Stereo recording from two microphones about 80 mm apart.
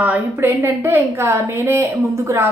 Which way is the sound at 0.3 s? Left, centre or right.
Right.